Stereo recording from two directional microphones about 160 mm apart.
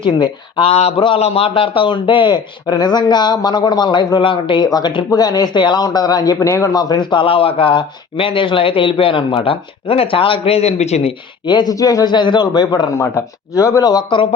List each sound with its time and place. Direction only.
0.0 s a man's voice: 30° left (ahead or behind)
11.4 s speech: 25° left (ahead or behind)